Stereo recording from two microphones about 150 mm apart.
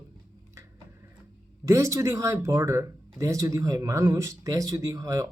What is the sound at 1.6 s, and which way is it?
Speech, 20° right (ahead or behind).